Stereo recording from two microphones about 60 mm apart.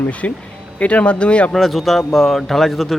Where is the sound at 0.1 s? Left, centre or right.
Left.